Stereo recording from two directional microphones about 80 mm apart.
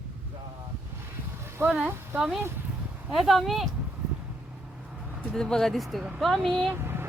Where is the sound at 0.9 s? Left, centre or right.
Right.